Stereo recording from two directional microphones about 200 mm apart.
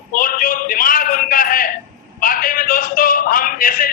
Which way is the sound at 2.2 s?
45° left (ahead or behind).